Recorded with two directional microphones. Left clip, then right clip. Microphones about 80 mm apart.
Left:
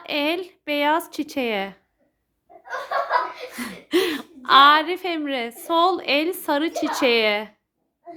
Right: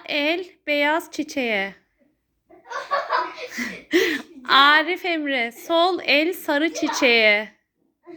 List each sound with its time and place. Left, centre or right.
0.0 s speech: left
3.5 s speech: left